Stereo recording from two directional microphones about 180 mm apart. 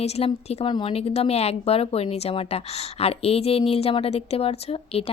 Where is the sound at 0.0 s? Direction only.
30° left (ahead or behind).